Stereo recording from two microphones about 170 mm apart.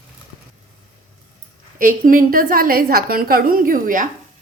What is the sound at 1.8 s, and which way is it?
A woman's voice, 55° right (ahead or behind).